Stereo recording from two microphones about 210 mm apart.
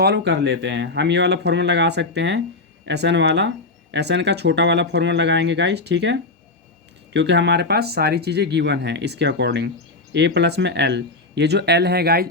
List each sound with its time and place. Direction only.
0.0 s speech: 55° right (ahead or behind)